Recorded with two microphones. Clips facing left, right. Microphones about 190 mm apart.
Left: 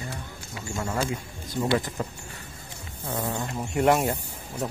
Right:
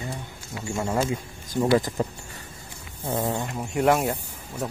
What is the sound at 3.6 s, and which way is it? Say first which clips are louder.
Speech: even; centre (ahead or behind).